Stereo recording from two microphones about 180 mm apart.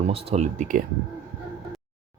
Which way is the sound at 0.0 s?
35° right (ahead or behind).